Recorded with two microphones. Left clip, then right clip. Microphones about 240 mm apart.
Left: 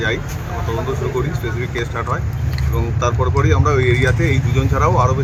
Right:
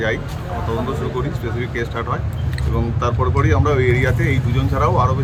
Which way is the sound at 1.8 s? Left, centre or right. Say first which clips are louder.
Left 2 dB; centre.